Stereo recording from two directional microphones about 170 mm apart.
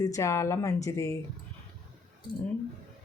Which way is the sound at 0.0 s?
15° left (ahead or behind).